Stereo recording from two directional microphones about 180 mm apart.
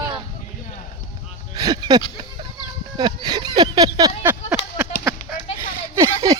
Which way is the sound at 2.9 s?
20° right (ahead or behind).